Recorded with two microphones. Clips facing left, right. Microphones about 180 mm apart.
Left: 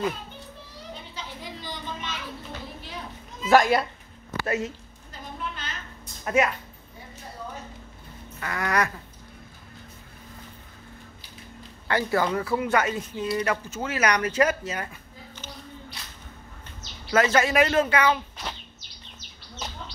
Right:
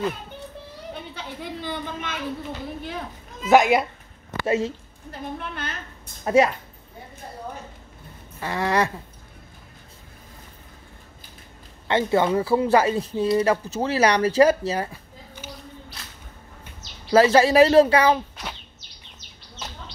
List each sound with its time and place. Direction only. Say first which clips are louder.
1.1 s a sound: right 5 dB; 60° right (ahead or behind)
3.5 s speech: right 3 dB; 20° right (ahead or behind)
5.4 s a woman's voice: right 2 dB; 60° right (ahead or behind)
6.2 s speech: right 5 dB; 30° right (ahead or behind)
8.4 s speech: right 4 dB; 30° right (ahead or behind)
11.9 s speech: right 4 dB; 25° right (ahead or behind)
17.1 s speech: right 6 dB; 30° right (ahead or behind)